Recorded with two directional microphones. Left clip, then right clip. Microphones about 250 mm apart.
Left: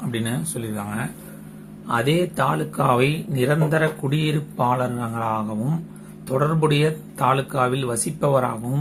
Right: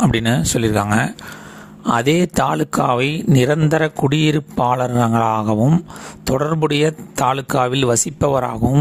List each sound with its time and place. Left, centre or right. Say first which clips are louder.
0.1 s speech: right 10 dB; right